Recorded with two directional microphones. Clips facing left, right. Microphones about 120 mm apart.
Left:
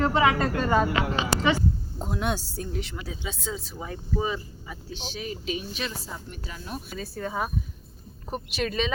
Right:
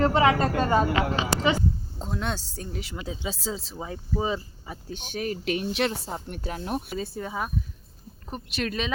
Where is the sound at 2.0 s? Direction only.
10° left (ahead or behind); by 3.0 s 5° right (ahead or behind).